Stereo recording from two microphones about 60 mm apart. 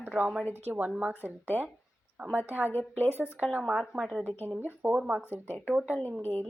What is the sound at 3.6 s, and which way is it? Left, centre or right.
Speech, centre.